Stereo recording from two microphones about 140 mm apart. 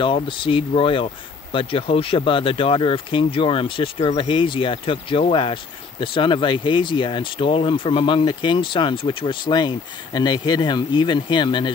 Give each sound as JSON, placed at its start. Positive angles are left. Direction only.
{"t": 0.0, "sound": "speech", "side_deg": 35}